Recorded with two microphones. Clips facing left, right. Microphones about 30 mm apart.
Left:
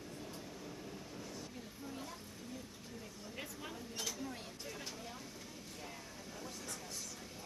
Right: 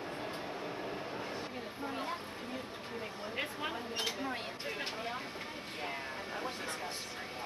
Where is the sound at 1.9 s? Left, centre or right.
Right.